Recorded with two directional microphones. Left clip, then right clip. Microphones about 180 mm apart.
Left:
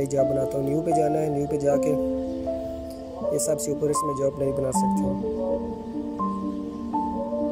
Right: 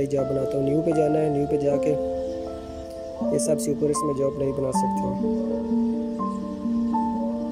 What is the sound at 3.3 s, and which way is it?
Speech, 15° right (ahead or behind).